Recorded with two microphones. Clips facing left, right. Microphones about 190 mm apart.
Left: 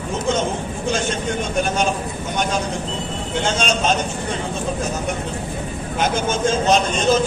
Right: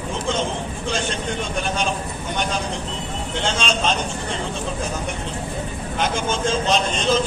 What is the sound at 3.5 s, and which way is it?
Speech, 45° left (ahead or behind).